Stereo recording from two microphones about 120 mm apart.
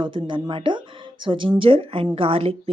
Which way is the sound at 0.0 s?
45° right (ahead or behind).